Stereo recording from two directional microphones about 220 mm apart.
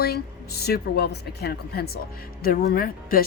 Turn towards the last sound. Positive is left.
turn(degrees=40)  # may be behind; listen again after turning